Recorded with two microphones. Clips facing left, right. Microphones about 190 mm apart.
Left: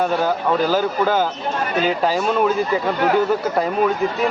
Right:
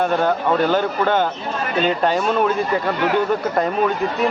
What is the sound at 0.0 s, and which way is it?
Speech, 5° left (ahead or behind).